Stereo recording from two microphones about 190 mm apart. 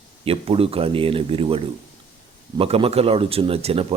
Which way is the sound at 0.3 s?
30° right (ahead or behind).